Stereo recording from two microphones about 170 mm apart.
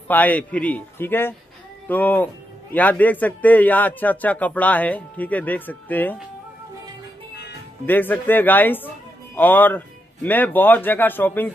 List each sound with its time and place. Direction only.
0.1 s speech: 10° left (ahead or behind)
7.8 s speech: 10° left (ahead or behind)